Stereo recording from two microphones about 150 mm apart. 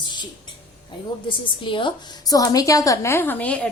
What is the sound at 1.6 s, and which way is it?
A woman's voice, 35° left (ahead or behind).